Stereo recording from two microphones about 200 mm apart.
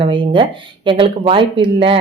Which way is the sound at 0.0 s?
25° right (ahead or behind).